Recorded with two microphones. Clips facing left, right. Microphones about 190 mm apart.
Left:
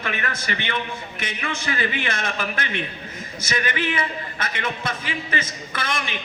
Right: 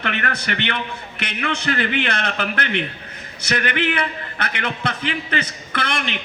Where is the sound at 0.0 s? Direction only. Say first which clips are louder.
Right 3 dB; 70° right (ahead or behind).